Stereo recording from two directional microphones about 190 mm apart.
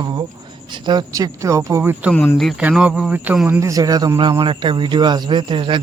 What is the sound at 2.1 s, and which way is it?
Speech, 10° left (ahead or behind).